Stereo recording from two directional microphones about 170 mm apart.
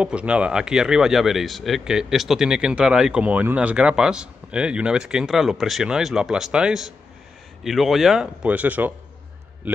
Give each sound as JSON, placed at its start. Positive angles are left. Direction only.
{"t": 0.0, "sound": "speech", "side_deg": -5}